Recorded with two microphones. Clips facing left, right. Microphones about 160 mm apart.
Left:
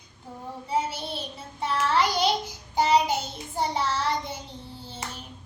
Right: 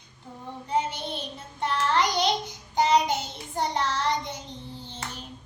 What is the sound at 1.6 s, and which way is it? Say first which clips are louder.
Child singing: even; 5° left (ahead or behind).